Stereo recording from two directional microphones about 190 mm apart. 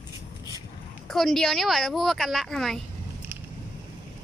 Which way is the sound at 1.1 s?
Centre (ahead or behind).